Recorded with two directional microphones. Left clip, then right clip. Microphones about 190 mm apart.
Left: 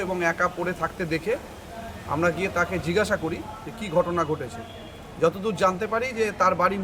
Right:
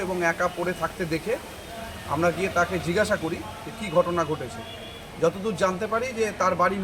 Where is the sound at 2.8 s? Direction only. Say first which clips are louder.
Even; centre (ahead or behind).